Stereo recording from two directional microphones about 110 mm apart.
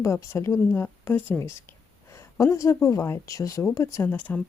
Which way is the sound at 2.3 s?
30° left (ahead or behind).